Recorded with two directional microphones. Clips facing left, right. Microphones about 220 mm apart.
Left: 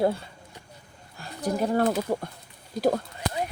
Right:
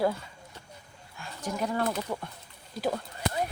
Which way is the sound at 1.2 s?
35° left (ahead or behind).